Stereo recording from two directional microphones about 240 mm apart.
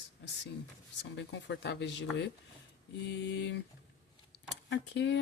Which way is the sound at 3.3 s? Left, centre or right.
Left.